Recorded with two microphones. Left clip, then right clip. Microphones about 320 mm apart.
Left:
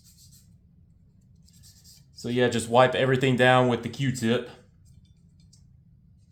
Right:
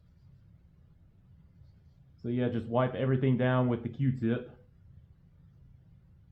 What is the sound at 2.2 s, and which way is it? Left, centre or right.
Speech, centre.